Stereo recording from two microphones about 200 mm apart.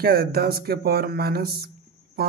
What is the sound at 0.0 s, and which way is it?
Speech, 50° right (ahead or behind).